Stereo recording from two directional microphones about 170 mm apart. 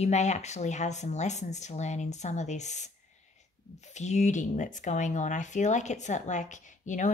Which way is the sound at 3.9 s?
40° left (ahead or behind).